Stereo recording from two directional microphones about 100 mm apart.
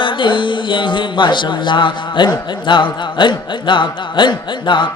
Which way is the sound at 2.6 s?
50° left (ahead or behind).